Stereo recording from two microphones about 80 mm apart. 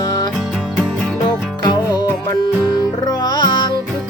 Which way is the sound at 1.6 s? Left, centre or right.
Left.